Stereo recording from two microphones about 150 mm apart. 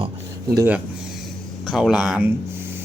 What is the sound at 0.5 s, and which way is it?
Speech, 15° right (ahead or behind).